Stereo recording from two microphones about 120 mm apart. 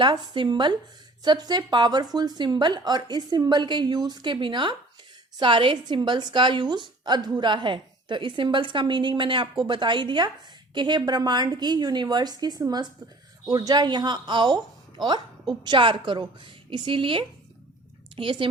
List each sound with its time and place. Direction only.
0.0 s a woman's voice: 40° right (ahead or behind)